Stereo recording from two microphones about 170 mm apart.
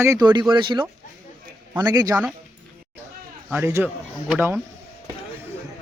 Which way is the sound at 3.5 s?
15° right (ahead or behind).